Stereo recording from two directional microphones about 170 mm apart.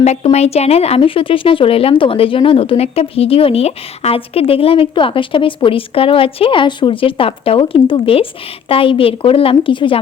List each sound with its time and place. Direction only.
0.0 s speech: 40° left (ahead or behind)